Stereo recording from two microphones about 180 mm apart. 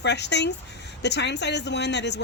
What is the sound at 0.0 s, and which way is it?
Speech, 70° left (ahead or behind).